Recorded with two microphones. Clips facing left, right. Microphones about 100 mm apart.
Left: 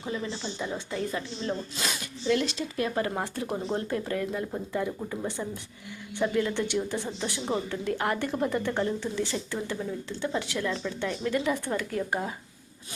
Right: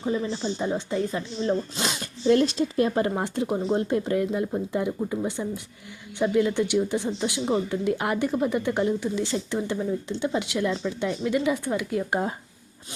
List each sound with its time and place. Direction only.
0.0 s speech: 25° right (ahead or behind)
9.2 s speech: 25° right (ahead or behind)